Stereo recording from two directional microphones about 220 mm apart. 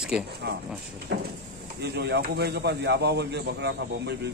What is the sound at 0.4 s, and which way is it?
A man's voice, 50° right (ahead or behind).